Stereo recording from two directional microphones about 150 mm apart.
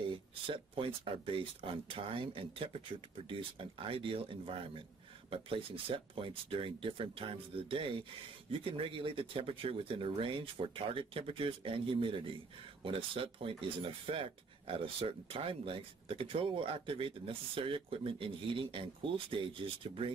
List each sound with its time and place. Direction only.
0.5 s speech: 35° right (ahead or behind)